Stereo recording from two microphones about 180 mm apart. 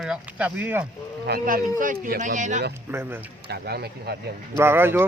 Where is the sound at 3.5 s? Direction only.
65° right (ahead or behind).